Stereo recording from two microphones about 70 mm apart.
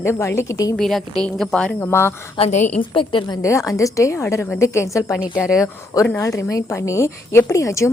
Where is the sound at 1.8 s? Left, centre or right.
Left.